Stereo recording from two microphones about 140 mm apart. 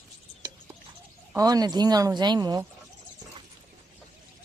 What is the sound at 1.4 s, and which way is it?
Speech, 25° right (ahead or behind).